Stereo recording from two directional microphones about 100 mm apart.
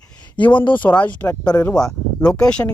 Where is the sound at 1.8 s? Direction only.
5° left (ahead or behind).